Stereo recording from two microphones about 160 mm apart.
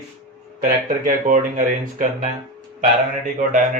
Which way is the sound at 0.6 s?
55° right (ahead or behind).